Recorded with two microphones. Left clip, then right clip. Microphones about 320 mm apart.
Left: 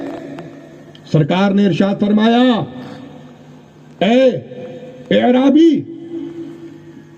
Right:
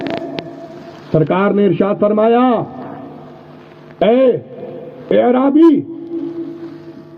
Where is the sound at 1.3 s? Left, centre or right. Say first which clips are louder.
Right 2 dB; left.